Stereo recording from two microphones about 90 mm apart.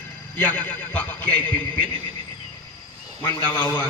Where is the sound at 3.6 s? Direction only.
10° left (ahead or behind).